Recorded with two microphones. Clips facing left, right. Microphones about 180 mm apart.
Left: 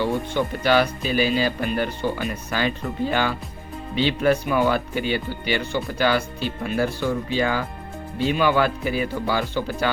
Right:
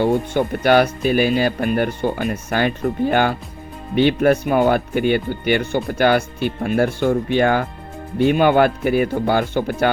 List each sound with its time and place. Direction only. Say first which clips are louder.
0.0 s speech: right 5 dB; 55° right (ahead or behind)